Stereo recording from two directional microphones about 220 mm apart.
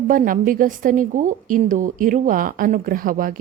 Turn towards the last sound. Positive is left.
turn(degrees=-40)  # may be behind; listen again after turning